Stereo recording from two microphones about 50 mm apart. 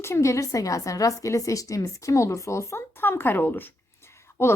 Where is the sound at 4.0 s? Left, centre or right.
Left.